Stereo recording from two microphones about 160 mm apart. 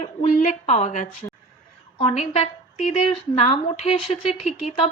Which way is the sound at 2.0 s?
40° left (ahead or behind).